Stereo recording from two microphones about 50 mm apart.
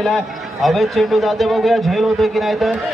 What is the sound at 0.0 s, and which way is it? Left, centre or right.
A man's voice, centre.